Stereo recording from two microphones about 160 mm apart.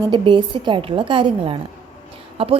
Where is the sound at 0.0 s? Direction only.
30° right (ahead or behind).